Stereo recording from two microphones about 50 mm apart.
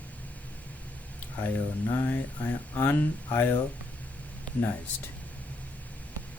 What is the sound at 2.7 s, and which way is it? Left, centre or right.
Speech, left.